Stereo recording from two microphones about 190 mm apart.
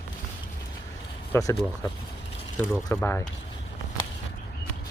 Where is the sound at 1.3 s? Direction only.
15° left (ahead or behind).